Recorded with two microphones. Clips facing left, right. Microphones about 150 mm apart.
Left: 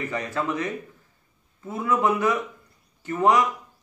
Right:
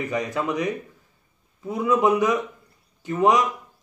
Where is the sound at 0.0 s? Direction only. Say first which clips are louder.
Right 2 dB; 15° right (ahead or behind).